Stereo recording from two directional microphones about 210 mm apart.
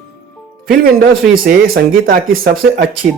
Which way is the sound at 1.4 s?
45° right (ahead or behind).